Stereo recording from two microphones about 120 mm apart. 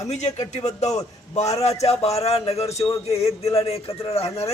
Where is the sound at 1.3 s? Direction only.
65° left (ahead or behind).